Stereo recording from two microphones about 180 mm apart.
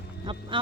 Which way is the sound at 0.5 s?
25° right (ahead or behind).